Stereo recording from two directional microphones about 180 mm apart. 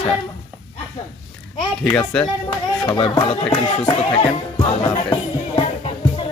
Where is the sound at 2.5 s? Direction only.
25° left (ahead or behind).